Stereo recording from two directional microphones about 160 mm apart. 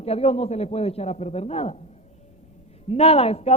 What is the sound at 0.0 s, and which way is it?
A woman's voice, 40° left (ahead or behind).